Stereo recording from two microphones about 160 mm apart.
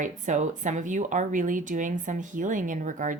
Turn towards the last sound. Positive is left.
turn(degrees=-55)  # may be behind; listen again after turning